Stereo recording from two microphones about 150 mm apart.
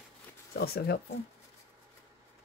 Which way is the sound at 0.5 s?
90° left.